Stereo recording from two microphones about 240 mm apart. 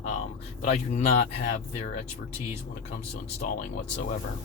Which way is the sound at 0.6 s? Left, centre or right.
Left.